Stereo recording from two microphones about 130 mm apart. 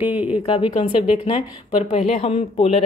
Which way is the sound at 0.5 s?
40° left (ahead or behind).